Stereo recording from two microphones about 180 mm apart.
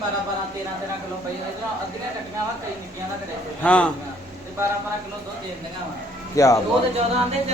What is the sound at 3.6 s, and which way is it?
Speech, 5° left (ahead or behind).